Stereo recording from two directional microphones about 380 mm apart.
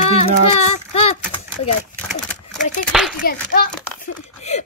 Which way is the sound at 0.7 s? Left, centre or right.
Left.